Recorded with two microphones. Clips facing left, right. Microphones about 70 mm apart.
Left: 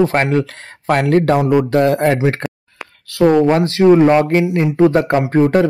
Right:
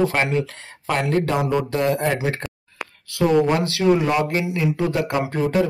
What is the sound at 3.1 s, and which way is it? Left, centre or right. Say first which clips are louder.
Speech: left 6 dB; left.